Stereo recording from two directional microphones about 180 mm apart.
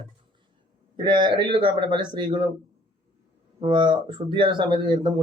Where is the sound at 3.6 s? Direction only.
25° right (ahead or behind).